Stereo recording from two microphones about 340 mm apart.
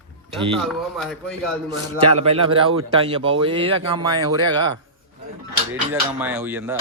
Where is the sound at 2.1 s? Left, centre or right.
Centre.